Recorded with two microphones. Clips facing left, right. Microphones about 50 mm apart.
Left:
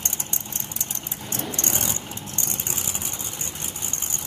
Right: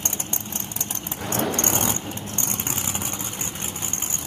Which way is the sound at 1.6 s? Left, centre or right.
Right.